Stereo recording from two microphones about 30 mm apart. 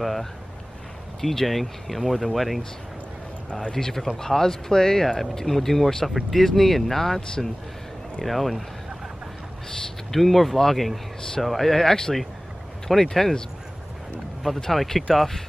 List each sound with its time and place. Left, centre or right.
0.0 s speech: centre
3.7 s speech: centre
10.1 s speech: centre
11.7 s speech: centre
14.7 s speech: centre